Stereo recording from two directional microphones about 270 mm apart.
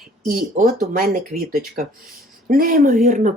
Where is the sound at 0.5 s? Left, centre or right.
Right.